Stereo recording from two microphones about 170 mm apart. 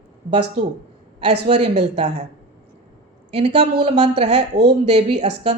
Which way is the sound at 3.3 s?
40° right (ahead or behind).